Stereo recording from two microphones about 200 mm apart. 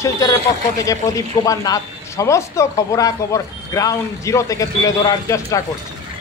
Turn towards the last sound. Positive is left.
turn(degrees=15)  # may be behind; listen again after turning